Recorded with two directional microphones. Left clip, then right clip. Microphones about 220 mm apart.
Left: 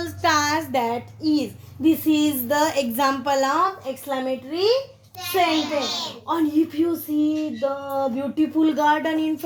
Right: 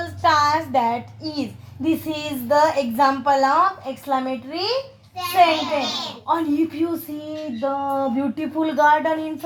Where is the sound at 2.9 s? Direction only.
50° left (ahead or behind).